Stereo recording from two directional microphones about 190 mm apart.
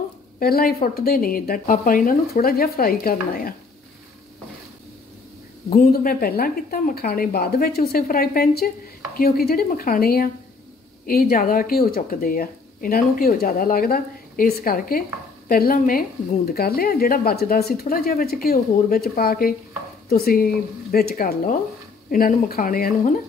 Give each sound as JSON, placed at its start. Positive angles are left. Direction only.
{"t": 0.4, "sound": "speech", "side_deg": 50}
{"t": 5.7, "sound": "speech", "side_deg": 50}